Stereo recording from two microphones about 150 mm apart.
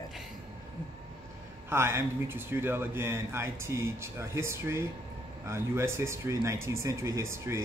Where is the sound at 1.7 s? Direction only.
15° right (ahead or behind).